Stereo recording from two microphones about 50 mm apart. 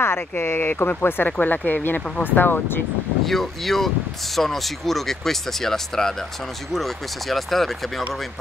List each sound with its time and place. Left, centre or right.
0.0 s speech: left
3.3 s speech: centre